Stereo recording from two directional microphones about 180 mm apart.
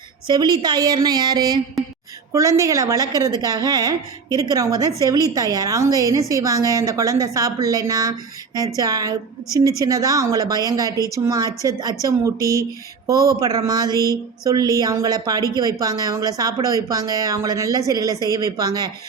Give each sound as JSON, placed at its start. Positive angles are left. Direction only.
{"t": 0.3, "sound": "a woman's voice", "side_deg": -25}